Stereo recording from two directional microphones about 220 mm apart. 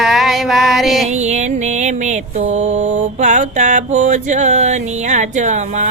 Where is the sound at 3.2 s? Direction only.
35° right (ahead or behind).